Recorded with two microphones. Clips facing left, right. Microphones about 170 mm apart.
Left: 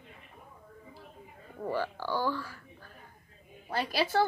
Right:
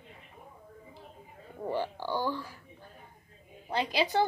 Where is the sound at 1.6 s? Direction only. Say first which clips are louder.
Even; 20° right (ahead or behind).